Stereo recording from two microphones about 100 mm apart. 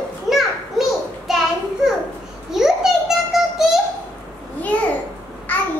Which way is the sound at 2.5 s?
5° right (ahead or behind).